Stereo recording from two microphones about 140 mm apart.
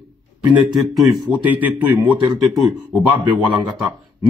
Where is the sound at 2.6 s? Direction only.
Centre (ahead or behind).